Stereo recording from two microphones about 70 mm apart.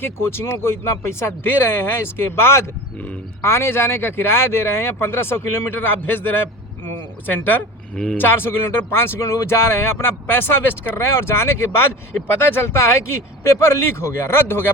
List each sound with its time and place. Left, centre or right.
0.0 s speech: left